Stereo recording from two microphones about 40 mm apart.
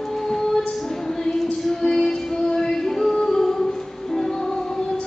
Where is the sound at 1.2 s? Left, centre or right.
Centre.